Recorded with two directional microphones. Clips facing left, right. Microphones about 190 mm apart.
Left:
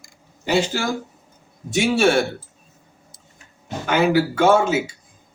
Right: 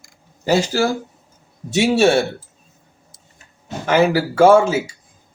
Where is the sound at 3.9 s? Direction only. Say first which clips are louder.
Right 2 dB; 35° right (ahead or behind).